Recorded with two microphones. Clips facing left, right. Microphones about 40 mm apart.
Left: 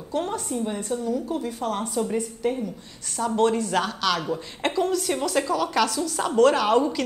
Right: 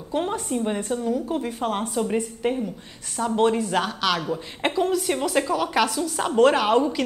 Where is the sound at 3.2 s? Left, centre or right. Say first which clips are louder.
Right 1 dB; centre.